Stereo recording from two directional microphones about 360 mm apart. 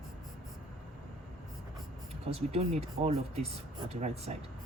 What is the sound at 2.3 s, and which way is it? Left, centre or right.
Speech, centre.